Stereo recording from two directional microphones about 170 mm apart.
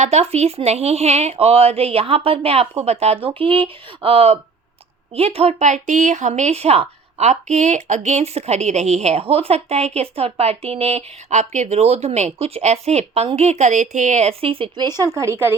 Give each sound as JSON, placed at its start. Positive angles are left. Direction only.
{"t": 0.0, "sound": "speech", "side_deg": -40}